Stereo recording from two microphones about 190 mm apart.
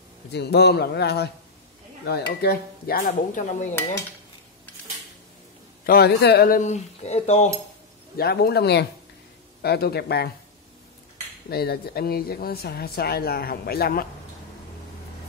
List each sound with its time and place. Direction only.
0.3 s speech: 60° left (ahead or behind)
5.9 s speech: 55° left (ahead or behind); by 7.5 s 35° left (ahead or behind)
8.2 s speech: 55° left (ahead or behind)
11.4 s speech: 55° left (ahead or behind)